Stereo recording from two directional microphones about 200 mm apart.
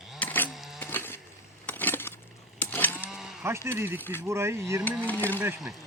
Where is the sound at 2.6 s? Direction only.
10° left (ahead or behind).